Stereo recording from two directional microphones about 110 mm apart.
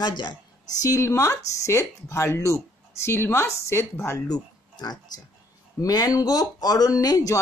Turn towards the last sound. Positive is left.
turn(degrees=30)  # may be behind; listen again after turning